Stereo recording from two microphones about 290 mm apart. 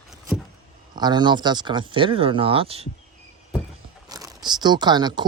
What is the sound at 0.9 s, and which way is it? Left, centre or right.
Speech, centre.